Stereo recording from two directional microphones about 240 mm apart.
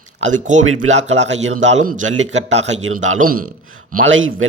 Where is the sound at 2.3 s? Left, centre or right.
Right.